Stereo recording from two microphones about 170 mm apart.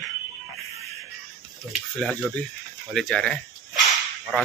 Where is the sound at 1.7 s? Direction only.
Centre (ahead or behind).